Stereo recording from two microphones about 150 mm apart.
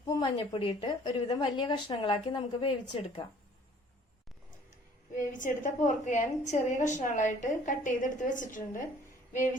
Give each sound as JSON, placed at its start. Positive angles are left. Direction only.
{"t": 0.0, "sound": "a sound", "side_deg": 25}
{"t": 0.3, "sound": "a woman's voice", "side_deg": 40}
{"t": 5.3, "sound": "a woman's voice", "side_deg": 60}